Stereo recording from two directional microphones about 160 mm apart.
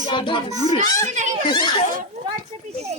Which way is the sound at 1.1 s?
50° right (ahead or behind).